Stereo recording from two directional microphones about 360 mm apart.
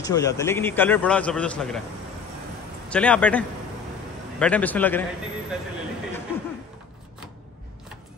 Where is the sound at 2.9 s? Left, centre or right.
Centre.